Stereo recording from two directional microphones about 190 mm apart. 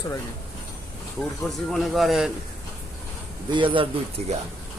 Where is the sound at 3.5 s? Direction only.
25° right (ahead or behind).